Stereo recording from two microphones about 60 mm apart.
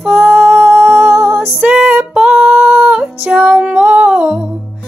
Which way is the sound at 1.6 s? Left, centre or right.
Centre.